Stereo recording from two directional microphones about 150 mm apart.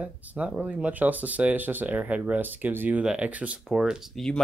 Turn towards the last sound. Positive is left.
turn(degrees=0)  # may be behind; listen again after turning